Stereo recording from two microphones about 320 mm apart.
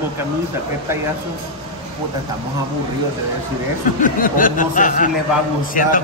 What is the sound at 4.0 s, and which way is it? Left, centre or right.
Speech, left.